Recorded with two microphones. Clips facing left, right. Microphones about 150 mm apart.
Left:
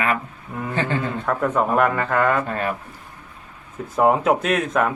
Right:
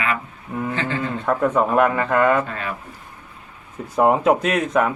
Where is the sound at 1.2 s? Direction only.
5° right (ahead or behind).